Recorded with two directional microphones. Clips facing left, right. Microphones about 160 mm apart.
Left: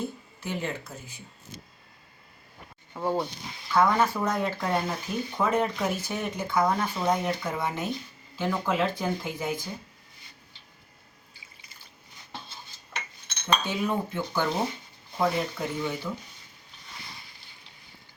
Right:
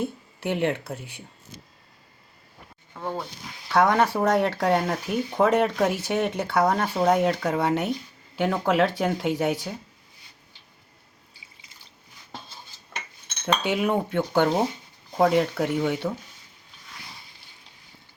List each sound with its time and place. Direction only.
0.0 s speech: 65° right (ahead or behind)
2.9 s speech: 15° left (ahead or behind)
3.7 s speech: 75° right (ahead or behind)
13.6 s speech: 70° right (ahead or behind)